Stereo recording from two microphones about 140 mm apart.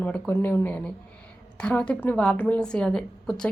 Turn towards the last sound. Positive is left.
turn(degrees=5)  # may be behind; listen again after turning